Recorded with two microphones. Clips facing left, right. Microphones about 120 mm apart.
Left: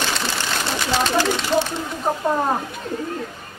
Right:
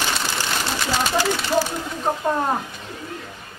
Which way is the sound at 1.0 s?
10° right (ahead or behind).